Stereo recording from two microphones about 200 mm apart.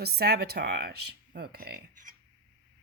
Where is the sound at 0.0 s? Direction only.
55° right (ahead or behind).